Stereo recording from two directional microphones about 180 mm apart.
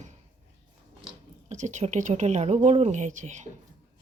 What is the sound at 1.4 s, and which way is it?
A woman's voice, 40° right (ahead or behind).